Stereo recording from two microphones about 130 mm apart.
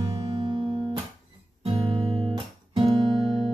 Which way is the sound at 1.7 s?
45° right (ahead or behind).